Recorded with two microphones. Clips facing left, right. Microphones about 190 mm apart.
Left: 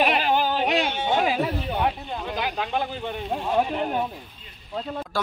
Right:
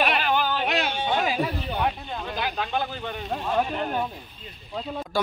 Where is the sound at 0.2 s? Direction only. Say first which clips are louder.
Left 2 dB; 35° left (ahead or behind).